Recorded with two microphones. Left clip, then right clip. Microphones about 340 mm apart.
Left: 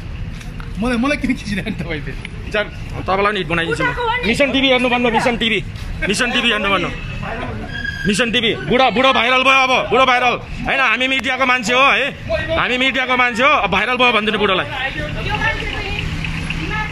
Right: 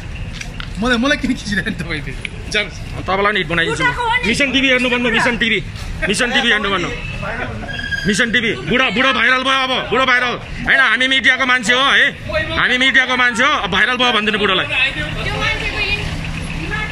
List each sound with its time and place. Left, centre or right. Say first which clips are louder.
0.8 s speech: right 2 dB; centre
3.1 s a man's voice: right 1 dB; centre
3.7 s speech: right 2 dB; left
4.3 s speech: left 2 dB; centre
6.0 s a man's voice: right 2 dB; centre
8.1 s a man's voice: even; centre